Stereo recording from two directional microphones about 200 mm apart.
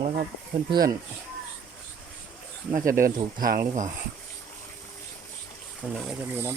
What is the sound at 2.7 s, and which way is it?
Speech, 45° right (ahead or behind).